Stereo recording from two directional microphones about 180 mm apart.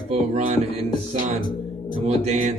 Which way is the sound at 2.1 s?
40° right (ahead or behind).